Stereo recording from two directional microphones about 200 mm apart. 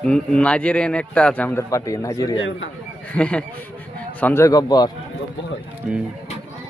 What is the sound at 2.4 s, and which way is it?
Speech, 70° left (ahead or behind).